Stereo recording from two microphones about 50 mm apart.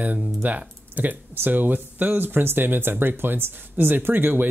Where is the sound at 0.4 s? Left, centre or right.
Right.